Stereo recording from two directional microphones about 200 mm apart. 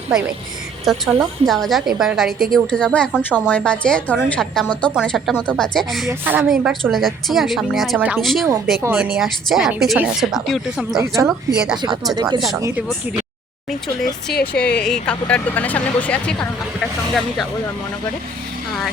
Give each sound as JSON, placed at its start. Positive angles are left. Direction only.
{"t": 0.9, "sound": "a woman's voice", "side_deg": 0}
{"t": 6.1, "sound": "a woman's voice", "side_deg": -10}
{"t": 10.9, "sound": "speech", "side_deg": -15}
{"t": 11.3, "sound": "a woman's voice", "side_deg": -5}
{"t": 12.1, "sound": "speech", "side_deg": -20}
{"t": 13.7, "sound": "a woman's voice", "side_deg": 0}
{"t": 14.3, "sound": "speech", "side_deg": 55}
{"t": 14.8, "sound": "a woman's voice", "side_deg": 5}